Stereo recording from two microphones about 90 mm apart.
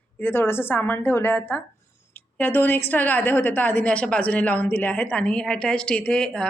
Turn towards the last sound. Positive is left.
turn(degrees=10)  # may be behind; listen again after turning